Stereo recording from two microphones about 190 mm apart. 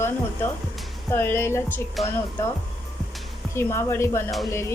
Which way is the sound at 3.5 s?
15° left (ahead or behind).